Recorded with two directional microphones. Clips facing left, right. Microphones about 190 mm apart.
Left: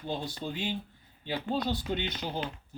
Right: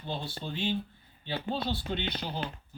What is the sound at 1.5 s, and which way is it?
Speech, 15° left (ahead or behind).